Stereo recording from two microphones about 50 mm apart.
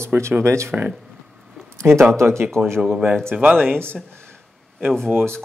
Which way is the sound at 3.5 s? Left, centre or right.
Centre.